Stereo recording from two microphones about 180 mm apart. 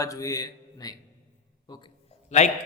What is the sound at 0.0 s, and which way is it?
Speech, 20° left (ahead or behind).